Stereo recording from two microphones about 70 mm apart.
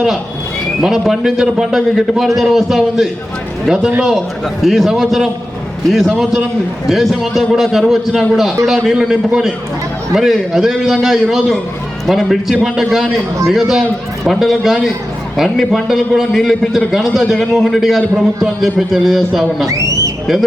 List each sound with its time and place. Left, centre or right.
0.8 s a man's voice: centre
19.6 s speech: right